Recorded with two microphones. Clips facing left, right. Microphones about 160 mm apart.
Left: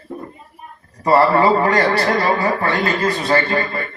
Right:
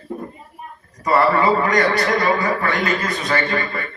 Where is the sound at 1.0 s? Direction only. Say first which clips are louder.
Left 3 dB; 30° left (ahead or behind).